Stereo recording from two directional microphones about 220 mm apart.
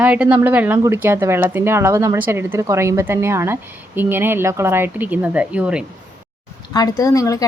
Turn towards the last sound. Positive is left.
turn(degrees=15)  # may be behind; listen again after turning